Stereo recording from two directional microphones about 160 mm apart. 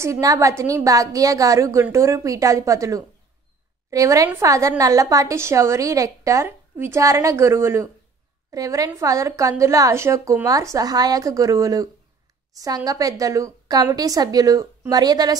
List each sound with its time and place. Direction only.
0.0 s a woman's voice: 20° right (ahead or behind)